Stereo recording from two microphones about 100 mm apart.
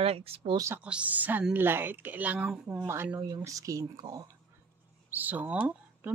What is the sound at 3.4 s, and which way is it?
Speech, 35° right (ahead or behind).